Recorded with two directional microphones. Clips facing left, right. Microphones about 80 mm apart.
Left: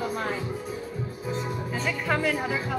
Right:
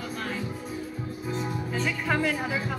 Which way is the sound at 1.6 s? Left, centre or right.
Centre.